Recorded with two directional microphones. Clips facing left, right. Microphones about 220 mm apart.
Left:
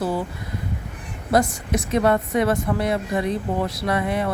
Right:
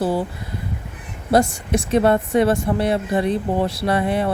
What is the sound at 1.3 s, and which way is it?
A woman's voice, 30° right (ahead or behind).